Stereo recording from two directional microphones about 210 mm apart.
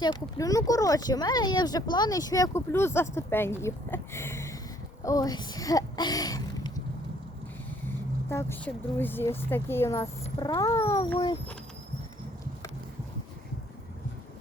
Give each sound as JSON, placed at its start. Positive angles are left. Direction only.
{"t": 0.0, "sound": "speech", "side_deg": 20}
{"t": 7.9, "sound": "speech", "side_deg": 10}